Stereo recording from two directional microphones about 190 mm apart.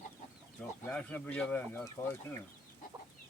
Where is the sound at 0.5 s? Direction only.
5° left (ahead or behind).